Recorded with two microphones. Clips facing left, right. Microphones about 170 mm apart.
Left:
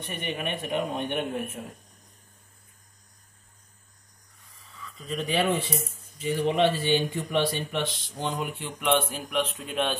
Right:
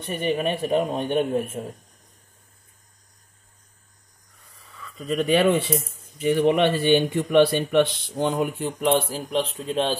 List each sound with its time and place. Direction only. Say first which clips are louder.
0.0 s a man's voice: right 8 dB; 35° right (ahead or behind)
5.0 s speech: right 7 dB; 65° right (ahead or behind); by 9.9 s 30° right (ahead or behind)